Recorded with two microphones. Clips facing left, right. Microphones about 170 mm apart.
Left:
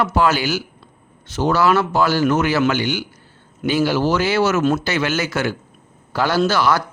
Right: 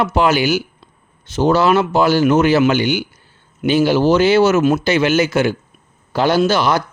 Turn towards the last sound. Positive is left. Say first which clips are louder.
# right 2 dB
turn(degrees=-20)  # may be behind; listen again after turning